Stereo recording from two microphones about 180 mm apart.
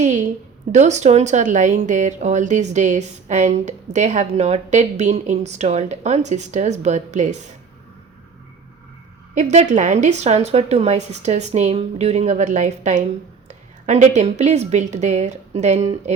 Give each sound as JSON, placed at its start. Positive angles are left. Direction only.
{"t": 0.0, "sound": "a woman's voice", "side_deg": -45}
{"t": 9.3, "sound": "speech", "side_deg": -40}